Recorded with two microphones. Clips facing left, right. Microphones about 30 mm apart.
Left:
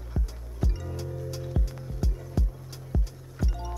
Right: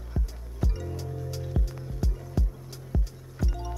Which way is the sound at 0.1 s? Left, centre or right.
Centre.